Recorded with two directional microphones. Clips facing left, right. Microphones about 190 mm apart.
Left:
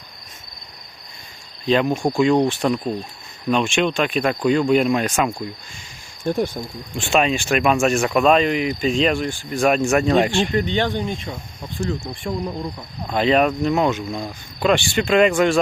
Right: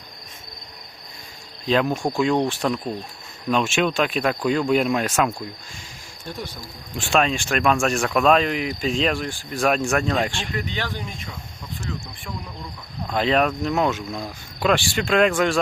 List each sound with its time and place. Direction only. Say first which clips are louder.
1.6 s speech: left 3 dB; centre (ahead or behind)
6.2 s speech: left 12 dB; 50° left (ahead or behind)
6.9 s speech: left 2 dB; centre (ahead or behind)
10.4 s speech: left 8 dB; 30° left (ahead or behind)
13.1 s speech: left 3 dB; centre (ahead or behind)